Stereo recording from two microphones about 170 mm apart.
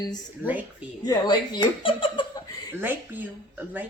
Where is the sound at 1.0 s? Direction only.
25° left (ahead or behind).